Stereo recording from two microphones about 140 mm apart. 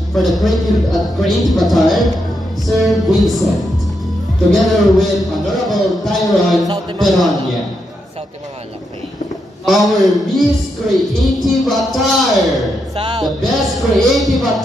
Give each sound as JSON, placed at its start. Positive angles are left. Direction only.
{"t": 0.1, "sound": "speech", "side_deg": 0}
{"t": 9.7, "sound": "speech", "side_deg": 0}
{"t": 12.9, "sound": "music", "side_deg": -40}
{"t": 13.2, "sound": "speech", "side_deg": 0}